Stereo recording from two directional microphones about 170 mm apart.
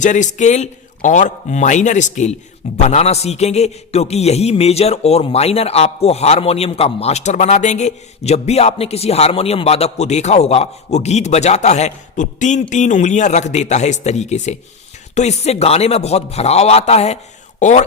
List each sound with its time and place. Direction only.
0.0 s a man's voice: 45° left (ahead or behind)